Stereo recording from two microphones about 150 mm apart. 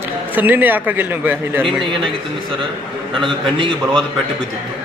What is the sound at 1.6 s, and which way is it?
Speech, 35° right (ahead or behind).